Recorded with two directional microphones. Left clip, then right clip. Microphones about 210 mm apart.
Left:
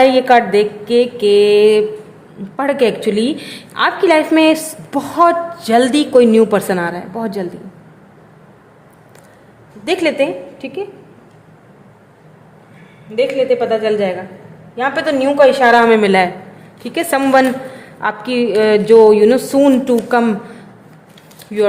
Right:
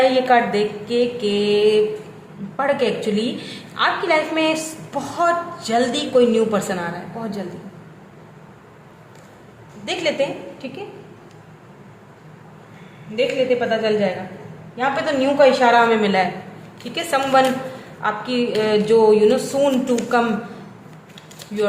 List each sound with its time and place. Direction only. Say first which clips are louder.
0.0 s a woman's voice: left 6 dB; 45° left (ahead or behind)
9.8 s a woman's voice: left 6 dB; 45° left (ahead or behind)
13.1 s a woman's voice: left 5 dB; 45° left (ahead or behind)